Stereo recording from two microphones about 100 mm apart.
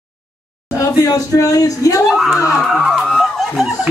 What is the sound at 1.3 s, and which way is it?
Speech, 30° left (ahead or behind).